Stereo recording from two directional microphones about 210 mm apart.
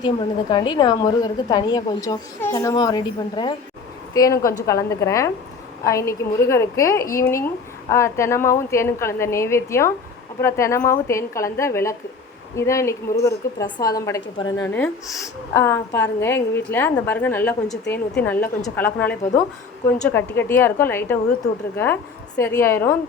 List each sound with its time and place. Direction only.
0.0 s a woman's voice: 20° left (ahead or behind)